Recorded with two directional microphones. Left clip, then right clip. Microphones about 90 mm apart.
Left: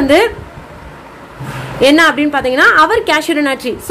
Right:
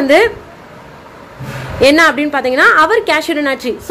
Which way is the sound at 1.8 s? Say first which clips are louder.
Even; 30° right (ahead or behind).